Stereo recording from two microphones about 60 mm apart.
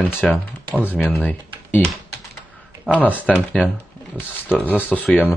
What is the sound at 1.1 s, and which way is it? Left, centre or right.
Computer keyboard, left.